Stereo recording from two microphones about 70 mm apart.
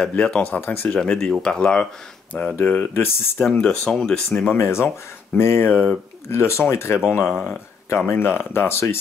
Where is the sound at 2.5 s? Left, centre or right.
Left.